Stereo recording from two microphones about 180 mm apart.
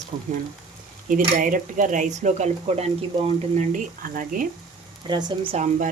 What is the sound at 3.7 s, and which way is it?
Speech, 50° right (ahead or behind).